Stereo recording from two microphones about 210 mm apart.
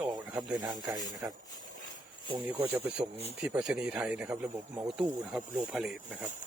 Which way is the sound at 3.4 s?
5° right (ahead or behind).